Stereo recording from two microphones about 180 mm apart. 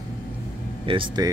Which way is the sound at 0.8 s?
30° right (ahead or behind).